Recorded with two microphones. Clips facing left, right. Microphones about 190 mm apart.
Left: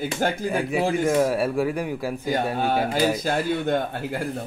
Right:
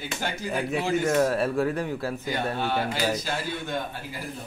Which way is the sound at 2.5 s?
45° left (ahead or behind).